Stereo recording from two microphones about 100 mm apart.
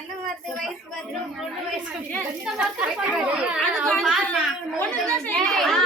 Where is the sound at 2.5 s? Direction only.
5° right (ahead or behind).